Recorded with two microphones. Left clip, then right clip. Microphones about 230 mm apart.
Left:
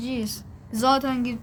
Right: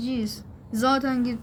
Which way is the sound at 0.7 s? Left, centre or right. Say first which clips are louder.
Left 2 dB; centre.